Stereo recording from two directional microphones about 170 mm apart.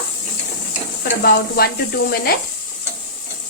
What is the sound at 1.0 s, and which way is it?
Speech, 70° left (ahead or behind).